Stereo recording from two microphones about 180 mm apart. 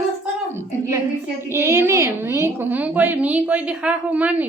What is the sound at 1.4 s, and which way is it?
A woman's voice, 15° right (ahead or behind).